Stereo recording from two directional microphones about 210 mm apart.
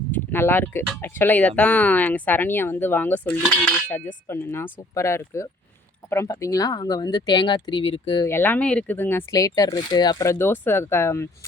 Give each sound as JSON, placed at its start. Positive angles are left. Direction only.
{"t": 0.1, "sound": "speech", "side_deg": 10}
{"t": 8.3, "sound": "speech", "side_deg": 10}